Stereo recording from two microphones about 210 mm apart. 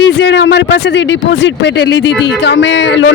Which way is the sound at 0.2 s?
55° left (ahead or behind).